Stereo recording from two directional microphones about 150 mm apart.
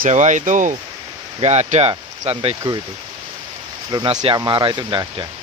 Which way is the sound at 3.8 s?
30° right (ahead or behind).